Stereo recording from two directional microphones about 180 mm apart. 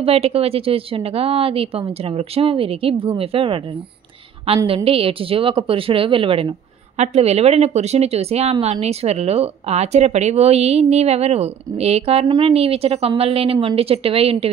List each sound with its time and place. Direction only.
0.0 s speech: 35° right (ahead or behind)
4.6 s speech: 30° right (ahead or behind)